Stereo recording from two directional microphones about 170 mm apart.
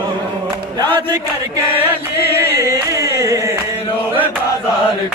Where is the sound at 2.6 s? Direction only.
20° right (ahead or behind).